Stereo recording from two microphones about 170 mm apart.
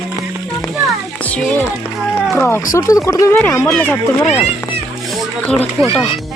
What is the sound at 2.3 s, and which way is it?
Speech, 10° left (ahead or behind).